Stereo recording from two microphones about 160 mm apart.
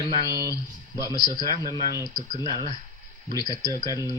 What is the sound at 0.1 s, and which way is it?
Speech, 25° left (ahead or behind).